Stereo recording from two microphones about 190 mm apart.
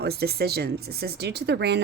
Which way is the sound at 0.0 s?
55° right (ahead or behind).